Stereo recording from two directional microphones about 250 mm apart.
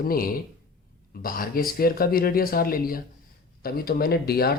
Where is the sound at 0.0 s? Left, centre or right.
Left.